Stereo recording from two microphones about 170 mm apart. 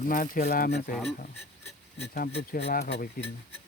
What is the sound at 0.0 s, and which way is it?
Speech, 55° left (ahead or behind).